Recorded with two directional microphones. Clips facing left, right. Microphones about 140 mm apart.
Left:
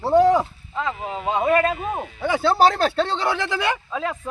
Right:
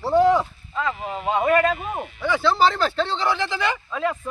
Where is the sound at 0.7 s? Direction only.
15° left (ahead or behind).